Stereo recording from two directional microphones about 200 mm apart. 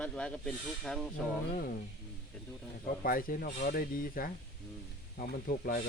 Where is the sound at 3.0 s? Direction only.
45° left (ahead or behind).